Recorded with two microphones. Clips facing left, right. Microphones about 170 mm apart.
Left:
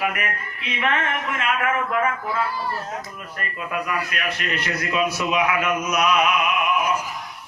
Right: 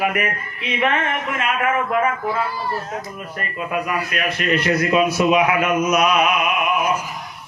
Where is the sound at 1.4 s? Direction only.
20° right (ahead or behind).